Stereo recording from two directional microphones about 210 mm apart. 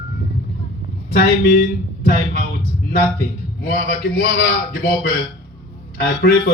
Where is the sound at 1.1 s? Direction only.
45° left (ahead or behind).